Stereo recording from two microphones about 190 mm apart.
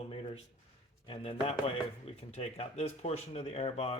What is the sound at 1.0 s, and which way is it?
Speech, 30° left (ahead or behind).